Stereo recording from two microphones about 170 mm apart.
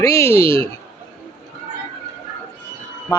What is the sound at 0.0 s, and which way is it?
Speech, 15° left (ahead or behind).